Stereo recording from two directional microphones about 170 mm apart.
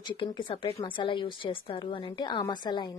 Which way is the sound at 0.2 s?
30° left (ahead or behind).